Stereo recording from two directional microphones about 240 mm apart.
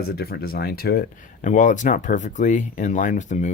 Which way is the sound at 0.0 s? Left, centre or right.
Left.